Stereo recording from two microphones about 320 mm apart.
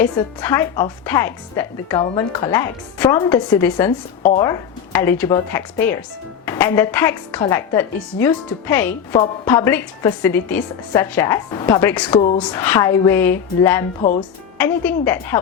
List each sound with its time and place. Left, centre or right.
0.0 s a woman's voice: centre
4.2 s speech: left
4.4 s a woman's voice: centre
14.0 s speech: left
14.6 s a woman's voice: centre